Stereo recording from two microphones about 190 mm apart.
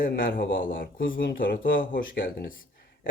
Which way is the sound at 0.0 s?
50° left (ahead or behind).